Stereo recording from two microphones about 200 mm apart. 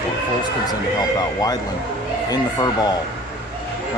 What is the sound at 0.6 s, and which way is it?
A man's voice, 20° left (ahead or behind).